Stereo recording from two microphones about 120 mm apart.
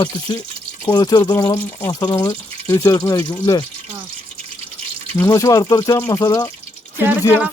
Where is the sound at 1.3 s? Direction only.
25° left (ahead or behind).